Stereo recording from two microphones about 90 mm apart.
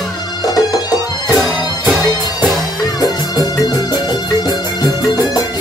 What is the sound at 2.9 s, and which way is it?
Music, 45° left (ahead or behind).